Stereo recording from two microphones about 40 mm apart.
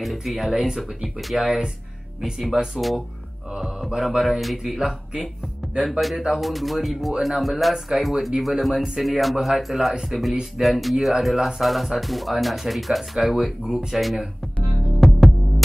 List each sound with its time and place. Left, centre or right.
0.0 s speech: centre
3.5 s mantra: centre
4.2 s speech: centre
6.4 s speech: centre
15.0 s music: centre